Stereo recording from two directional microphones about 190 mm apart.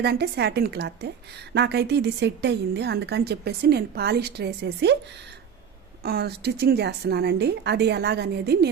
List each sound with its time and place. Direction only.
0.0 s a woman's voice: 60° right (ahead or behind)
6.0 s a woman's voice: 55° right (ahead or behind)